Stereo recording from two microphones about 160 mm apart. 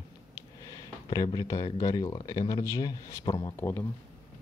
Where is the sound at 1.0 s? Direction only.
25° left (ahead or behind).